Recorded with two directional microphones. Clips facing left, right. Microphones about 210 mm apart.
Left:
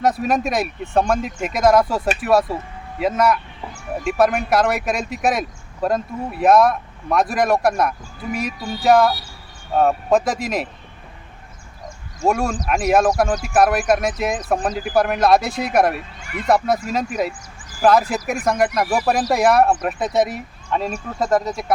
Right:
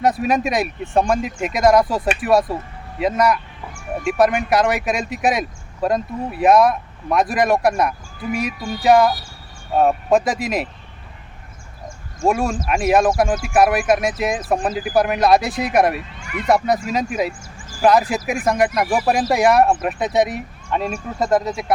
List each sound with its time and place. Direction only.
0.0 s speech: centre (ahead or behind)
3.0 s speech: centre (ahead or behind)
12.2 s speech: centre (ahead or behind)